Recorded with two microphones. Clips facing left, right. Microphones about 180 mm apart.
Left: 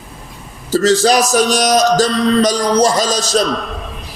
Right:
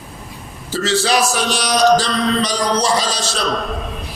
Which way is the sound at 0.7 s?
40° left (ahead or behind).